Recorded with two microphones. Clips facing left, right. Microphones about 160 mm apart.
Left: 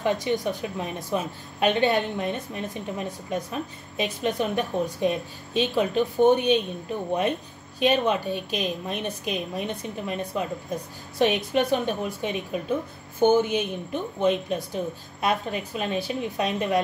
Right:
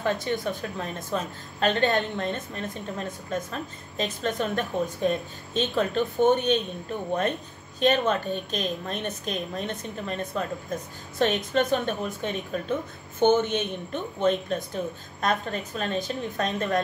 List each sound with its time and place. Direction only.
0.0 s a woman's voice: 15° left (ahead or behind)
7.8 s a woman's voice: 10° left (ahead or behind)